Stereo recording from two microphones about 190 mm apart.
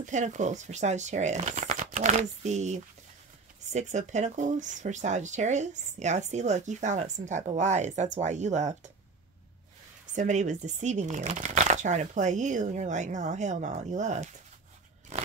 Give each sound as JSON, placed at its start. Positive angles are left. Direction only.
{"t": 0.0, "sound": "speech", "side_deg": -40}
{"t": 10.1, "sound": "speech", "side_deg": -40}